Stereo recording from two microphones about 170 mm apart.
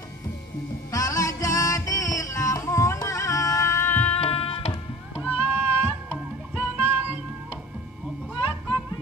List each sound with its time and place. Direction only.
0.9 s music: 20° left (ahead or behind)
4.1 s music: 35° left (ahead or behind)
5.2 s music: 15° right (ahead or behind)